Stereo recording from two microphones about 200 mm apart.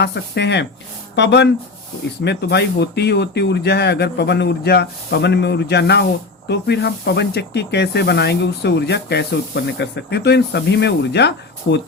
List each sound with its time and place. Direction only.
0.0 s speech: 60° left (ahead or behind)